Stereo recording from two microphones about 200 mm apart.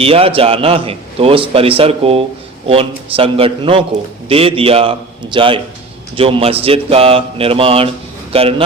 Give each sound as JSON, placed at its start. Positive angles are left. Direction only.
{"t": 0.0, "sound": "a man's voice", "side_deg": -30}